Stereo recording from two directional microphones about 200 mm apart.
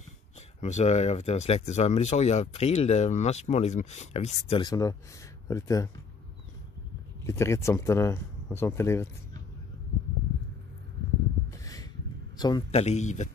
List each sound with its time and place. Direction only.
0.6 s speech: 35° left (ahead or behind); by 5.9 s 15° left (ahead or behind)
7.2 s speech: 15° left (ahead or behind)
11.5 s a sound: 15° left (ahead or behind)
12.4 s speech: 20° left (ahead or behind)
12.7 s speech: 35° left (ahead or behind)